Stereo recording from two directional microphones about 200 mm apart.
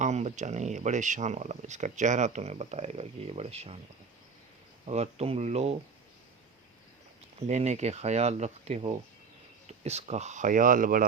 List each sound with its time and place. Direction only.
0.0 s speech: 35° right (ahead or behind)
4.9 s speech: 30° right (ahead or behind)
7.3 s speech: 35° right (ahead or behind)